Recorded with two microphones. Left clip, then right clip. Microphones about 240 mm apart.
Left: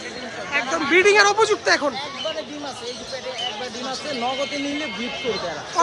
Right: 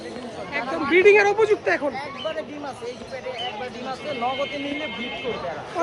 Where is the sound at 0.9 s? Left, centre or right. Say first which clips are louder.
Even; centre.